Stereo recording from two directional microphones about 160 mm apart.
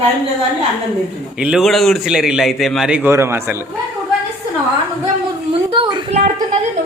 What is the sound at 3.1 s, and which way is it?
Speech, 15° right (ahead or behind).